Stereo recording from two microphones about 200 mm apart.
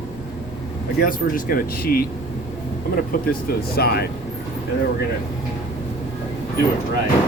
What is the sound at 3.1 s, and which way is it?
Speech, 45° left (ahead or behind).